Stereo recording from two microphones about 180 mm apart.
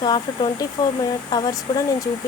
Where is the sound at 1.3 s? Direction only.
20° left (ahead or behind).